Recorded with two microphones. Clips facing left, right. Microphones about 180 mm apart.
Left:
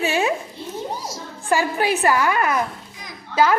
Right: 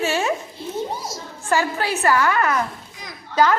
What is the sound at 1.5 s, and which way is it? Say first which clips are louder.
A woman's voice: left 2 dB; 15° left (ahead or behind).